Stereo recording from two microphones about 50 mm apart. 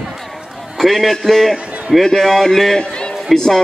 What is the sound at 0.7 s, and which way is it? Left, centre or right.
A man's voice, centre.